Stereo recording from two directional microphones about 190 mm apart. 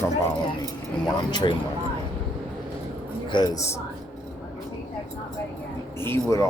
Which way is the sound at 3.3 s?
20° left (ahead or behind).